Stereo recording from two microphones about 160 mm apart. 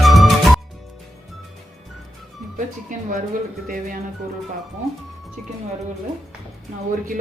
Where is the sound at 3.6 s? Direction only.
60° right (ahead or behind).